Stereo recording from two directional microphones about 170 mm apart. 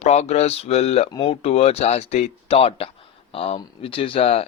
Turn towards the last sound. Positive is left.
turn(degrees=35)  # may be behind; listen again after turning